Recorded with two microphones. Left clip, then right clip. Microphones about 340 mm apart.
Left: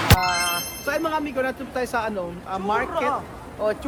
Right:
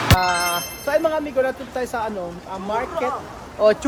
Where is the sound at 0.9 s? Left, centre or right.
Centre.